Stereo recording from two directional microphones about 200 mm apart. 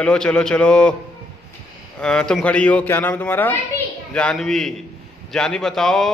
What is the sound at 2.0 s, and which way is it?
A man's voice, 5° left (ahead or behind).